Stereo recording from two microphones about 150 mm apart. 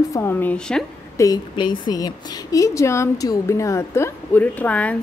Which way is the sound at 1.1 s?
25° left (ahead or behind).